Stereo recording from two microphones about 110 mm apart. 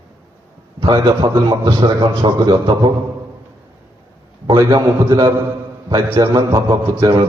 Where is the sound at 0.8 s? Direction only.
40° right (ahead or behind).